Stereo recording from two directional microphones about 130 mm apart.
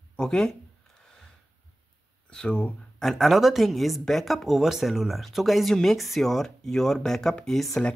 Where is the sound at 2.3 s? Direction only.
5° left (ahead or behind).